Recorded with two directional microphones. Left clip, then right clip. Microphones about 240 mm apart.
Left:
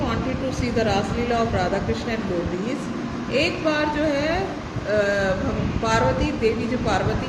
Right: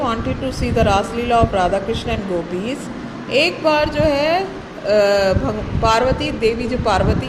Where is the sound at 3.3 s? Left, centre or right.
Right.